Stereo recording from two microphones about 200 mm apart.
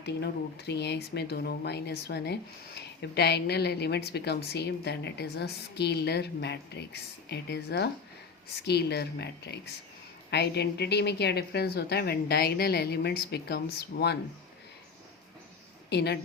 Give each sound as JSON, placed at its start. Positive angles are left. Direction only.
{"t": 0.0, "sound": "speech", "side_deg": 55}
{"t": 15.9, "sound": "speech", "side_deg": 55}